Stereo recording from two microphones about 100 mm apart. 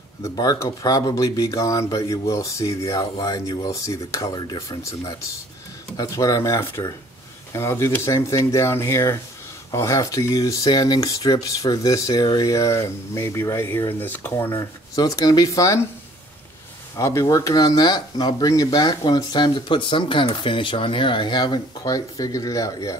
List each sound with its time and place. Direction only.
0.2 s speech: 35° left (ahead or behind)
4.3 s speech: 45° left (ahead or behind); by 14.7 s 25° left (ahead or behind)
15.0 s speech: 40° left (ahead or behind)
16.9 s speech: 30° left (ahead or behind)